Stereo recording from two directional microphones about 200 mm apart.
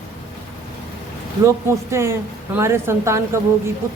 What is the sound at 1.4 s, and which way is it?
A woman's voice, 15° right (ahead or behind).